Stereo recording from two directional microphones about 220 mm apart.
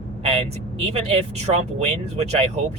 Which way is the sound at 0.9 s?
25° right (ahead or behind).